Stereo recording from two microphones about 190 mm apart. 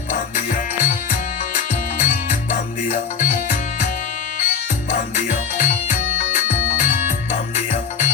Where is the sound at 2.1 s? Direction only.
40° left (ahead or behind).